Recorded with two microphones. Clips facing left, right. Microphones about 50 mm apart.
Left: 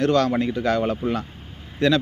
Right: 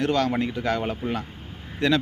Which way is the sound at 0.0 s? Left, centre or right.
Centre.